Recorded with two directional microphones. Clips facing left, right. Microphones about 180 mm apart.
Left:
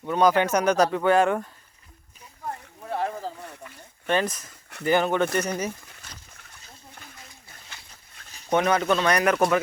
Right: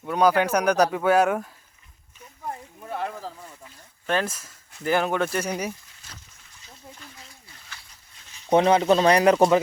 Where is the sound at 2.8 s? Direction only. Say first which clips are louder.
Left 2 dB; centre (ahead or behind).